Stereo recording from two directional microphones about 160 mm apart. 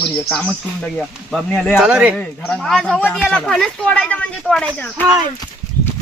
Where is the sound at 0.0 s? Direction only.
5° left (ahead or behind).